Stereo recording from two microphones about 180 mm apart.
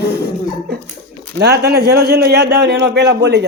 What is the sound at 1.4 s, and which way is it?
A man's voice, 65° right (ahead or behind).